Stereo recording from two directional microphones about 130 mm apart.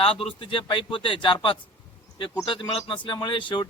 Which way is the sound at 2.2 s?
40° left (ahead or behind).